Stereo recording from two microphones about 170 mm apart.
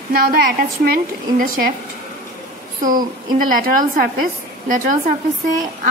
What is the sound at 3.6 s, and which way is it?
Speech, 55° right (ahead or behind).